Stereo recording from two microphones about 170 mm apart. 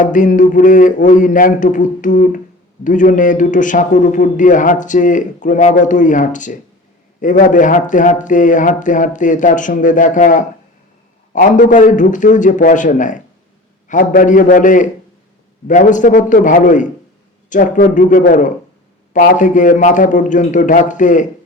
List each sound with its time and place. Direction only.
0.0 s a man's voice: 50° left (ahead or behind)